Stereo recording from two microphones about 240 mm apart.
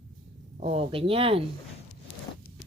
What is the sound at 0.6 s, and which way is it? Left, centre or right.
Speech, right.